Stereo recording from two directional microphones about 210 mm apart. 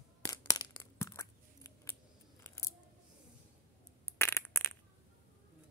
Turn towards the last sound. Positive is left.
turn(degrees=10)  # may be behind; listen again after turning